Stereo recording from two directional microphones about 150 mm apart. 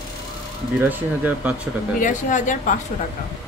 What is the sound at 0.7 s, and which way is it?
Speech, 10° right (ahead or behind).